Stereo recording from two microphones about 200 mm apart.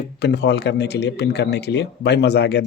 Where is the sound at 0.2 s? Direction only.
55° left (ahead or behind).